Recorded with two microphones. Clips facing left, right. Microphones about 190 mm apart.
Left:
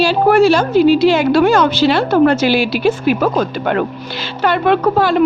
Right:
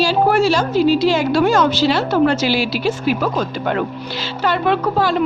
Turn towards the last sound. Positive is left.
turn(degrees=60)  # may be behind; listen again after turning